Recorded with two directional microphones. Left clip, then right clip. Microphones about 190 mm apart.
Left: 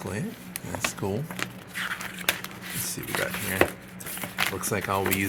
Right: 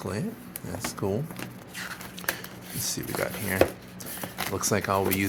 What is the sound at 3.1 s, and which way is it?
Speech, 15° right (ahead or behind).